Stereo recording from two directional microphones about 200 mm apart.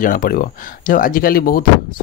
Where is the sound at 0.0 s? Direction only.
45° left (ahead or behind).